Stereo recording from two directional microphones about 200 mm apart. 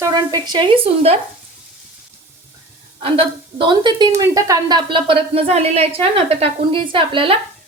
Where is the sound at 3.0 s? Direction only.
25° right (ahead or behind).